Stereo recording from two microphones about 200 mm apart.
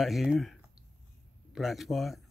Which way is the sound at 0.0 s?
Centre (ahead or behind).